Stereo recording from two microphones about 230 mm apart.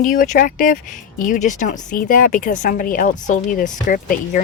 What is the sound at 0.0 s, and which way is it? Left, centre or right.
Speech, left.